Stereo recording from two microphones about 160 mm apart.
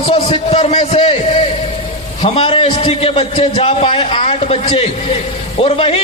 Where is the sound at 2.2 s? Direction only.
35° left (ahead or behind).